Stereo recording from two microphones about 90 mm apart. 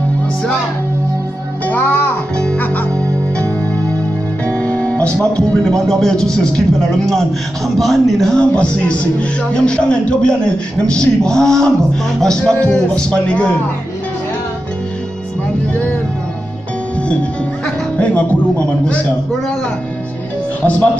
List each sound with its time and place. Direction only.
1.7 s music: 20° left (ahead or behind)
2.3 s music: 10° left (ahead or behind)
4.5 s a man's voice: 15° left (ahead or behind)
17.9 s a man's voice: 15° left (ahead or behind)